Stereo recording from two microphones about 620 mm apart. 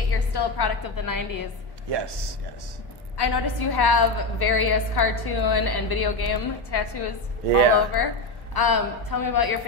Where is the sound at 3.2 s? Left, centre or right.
Left.